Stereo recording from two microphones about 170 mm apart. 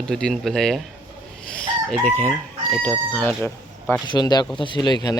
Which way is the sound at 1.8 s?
Centre (ahead or behind).